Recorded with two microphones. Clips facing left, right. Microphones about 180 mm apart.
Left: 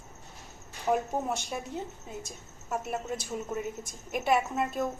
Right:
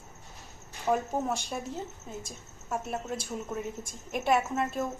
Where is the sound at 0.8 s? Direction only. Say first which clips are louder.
Even; 5° left (ahead or behind).